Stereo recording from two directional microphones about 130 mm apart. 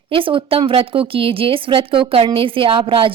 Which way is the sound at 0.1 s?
40° right (ahead or behind).